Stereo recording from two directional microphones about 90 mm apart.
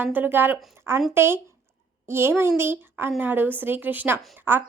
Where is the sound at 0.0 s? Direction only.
20° right (ahead or behind).